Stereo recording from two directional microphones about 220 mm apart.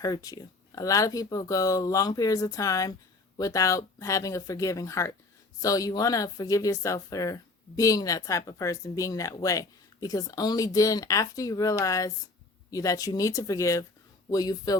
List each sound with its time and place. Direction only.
0.0 s speech: 15° left (ahead or behind)